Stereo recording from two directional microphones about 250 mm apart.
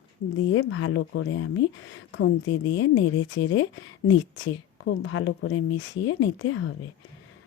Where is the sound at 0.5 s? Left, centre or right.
Left.